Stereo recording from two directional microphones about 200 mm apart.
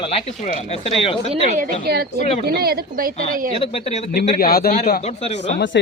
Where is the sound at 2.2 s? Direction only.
30° left (ahead or behind).